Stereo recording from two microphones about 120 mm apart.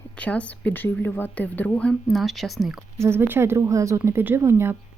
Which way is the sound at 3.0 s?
20° right (ahead or behind).